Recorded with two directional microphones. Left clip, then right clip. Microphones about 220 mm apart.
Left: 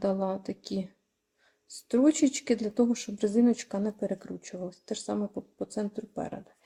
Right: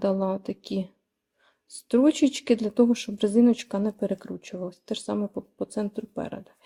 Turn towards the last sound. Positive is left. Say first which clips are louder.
# right 3 dB
turn(degrees=-20)  # may be behind; listen again after turning